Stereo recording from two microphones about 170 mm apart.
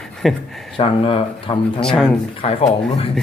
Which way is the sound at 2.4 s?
35° left (ahead or behind).